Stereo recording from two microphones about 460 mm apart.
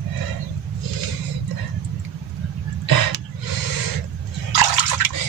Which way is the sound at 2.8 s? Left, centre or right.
Right.